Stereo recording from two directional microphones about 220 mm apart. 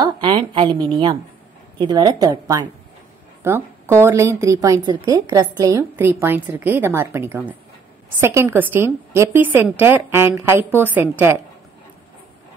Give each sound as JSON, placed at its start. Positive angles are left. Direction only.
{"t": 0.2, "sound": "a woman's voice", "side_deg": -25}